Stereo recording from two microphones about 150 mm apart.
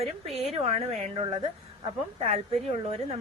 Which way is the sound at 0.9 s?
45° right (ahead or behind).